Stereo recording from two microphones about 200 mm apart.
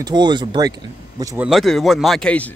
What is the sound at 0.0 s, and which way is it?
Speech, 20° right (ahead or behind).